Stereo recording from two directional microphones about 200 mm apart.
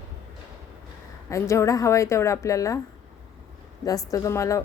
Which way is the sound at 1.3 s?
15° left (ahead or behind).